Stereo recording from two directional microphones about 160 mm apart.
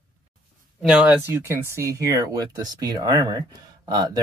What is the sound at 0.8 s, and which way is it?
Speech, 5° right (ahead or behind).